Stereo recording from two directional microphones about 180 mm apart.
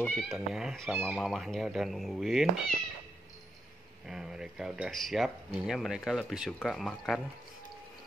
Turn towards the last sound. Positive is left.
turn(degrees=0)  # may be behind; listen again after turning